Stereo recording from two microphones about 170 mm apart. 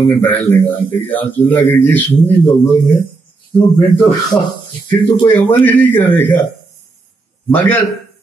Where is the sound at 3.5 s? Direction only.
10° left (ahead or behind).